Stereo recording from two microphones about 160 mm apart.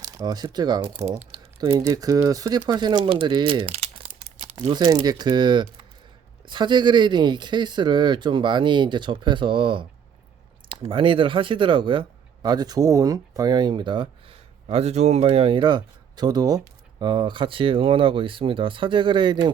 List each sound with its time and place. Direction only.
0.0 s speech: 20° right (ahead or behind)
1.0 s speech: 45° right (ahead or behind)
1.7 s speech: 20° right (ahead or behind); by 4.1 s 35° right (ahead or behind)
4.7 s speech: 25° right (ahead or behind)